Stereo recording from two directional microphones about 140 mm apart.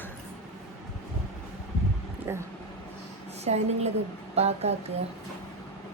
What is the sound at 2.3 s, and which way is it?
Speech, 20° right (ahead or behind).